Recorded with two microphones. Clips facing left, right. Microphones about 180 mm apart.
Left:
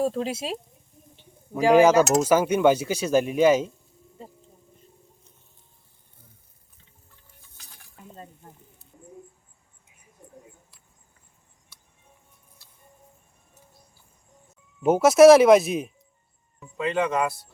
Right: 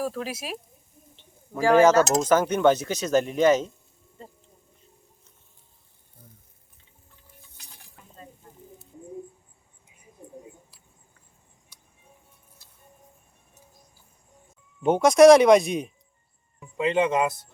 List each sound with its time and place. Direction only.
0.0 s speech: 25° left (ahead or behind)
1.1 s bird: 15° left (ahead or behind)
2.2 s speech: 10° left (ahead or behind)
14.8 s speech: 5° left (ahead or behind)
16.6 s speech: 20° right (ahead or behind)